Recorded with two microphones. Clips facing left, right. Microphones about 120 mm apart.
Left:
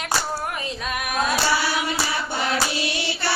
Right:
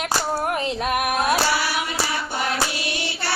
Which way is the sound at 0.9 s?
60° right (ahead or behind).